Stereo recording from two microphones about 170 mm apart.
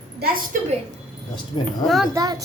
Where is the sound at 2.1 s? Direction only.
20° right (ahead or behind).